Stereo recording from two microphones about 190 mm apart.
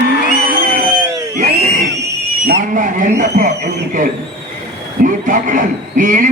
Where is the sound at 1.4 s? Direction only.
45° right (ahead or behind).